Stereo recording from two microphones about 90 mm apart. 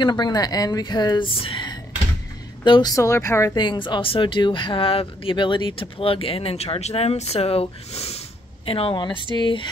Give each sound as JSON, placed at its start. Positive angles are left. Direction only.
{"t": 0.0, "sound": "speech", "side_deg": 50}
{"t": 1.4, "sound": "speech", "side_deg": 80}
{"t": 2.6, "sound": "a woman's voice", "side_deg": 60}
{"t": 2.9, "sound": "speech", "side_deg": 35}
{"t": 3.5, "sound": "speech", "side_deg": 60}
{"t": 8.6, "sound": "speech", "side_deg": 90}